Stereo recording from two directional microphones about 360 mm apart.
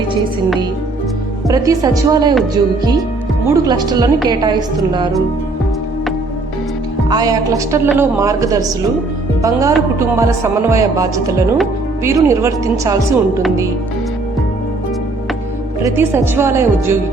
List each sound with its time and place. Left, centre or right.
1.5 s speech: centre
3.5 s speech: centre
7.1 s speech: centre
15.8 s speech: centre